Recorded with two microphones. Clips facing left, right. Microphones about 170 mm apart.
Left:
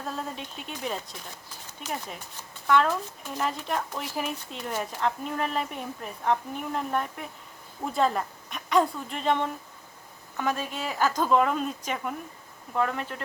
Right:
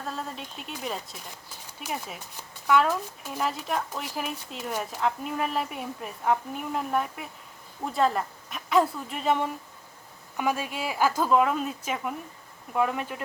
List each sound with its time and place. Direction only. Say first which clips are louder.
0.2 s a woman's voice: left 1 dB; centre (ahead or behind)